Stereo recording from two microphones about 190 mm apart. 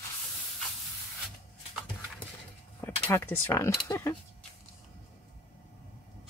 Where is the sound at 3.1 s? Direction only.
15° left (ahead or behind).